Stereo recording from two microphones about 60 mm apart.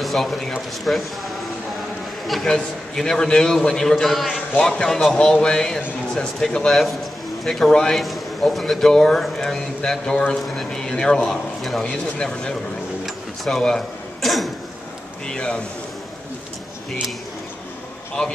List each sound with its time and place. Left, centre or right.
0.0 s a man's voice: centre
2.2 s a man's voice: centre
13.0 s a sound: centre
13.6 s a man's voice: centre